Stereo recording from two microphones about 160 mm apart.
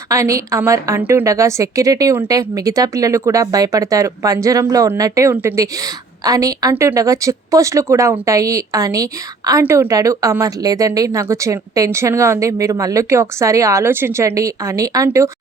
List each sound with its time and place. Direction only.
0.1 s a woman's voice: 20° right (ahead or behind)